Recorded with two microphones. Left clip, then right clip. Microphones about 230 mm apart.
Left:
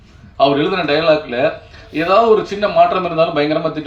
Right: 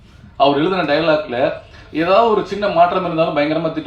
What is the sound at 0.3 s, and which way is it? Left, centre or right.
A man's voice, left.